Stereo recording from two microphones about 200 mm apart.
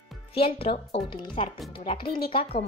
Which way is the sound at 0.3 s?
30° left (ahead or behind).